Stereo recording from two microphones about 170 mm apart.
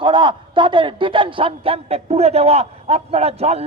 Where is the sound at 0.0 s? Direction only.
30° right (ahead or behind).